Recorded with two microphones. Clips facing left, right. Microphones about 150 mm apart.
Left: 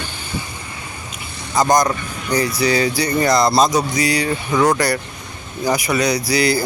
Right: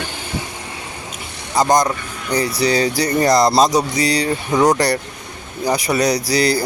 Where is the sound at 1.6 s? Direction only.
35° right (ahead or behind).